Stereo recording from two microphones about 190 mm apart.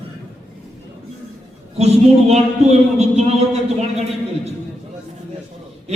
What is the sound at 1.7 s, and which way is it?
A man's voice, 35° right (ahead or behind).